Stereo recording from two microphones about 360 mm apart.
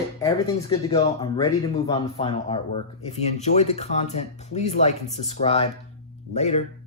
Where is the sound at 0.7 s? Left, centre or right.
Centre.